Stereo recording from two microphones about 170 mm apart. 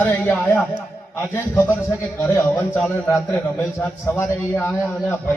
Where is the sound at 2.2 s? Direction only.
15° left (ahead or behind).